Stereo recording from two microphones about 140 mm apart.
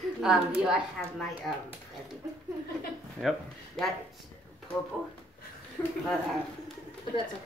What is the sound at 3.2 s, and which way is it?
Speech, 5° left (ahead or behind).